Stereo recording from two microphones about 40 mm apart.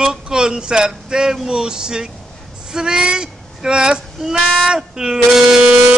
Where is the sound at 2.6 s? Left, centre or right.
Centre.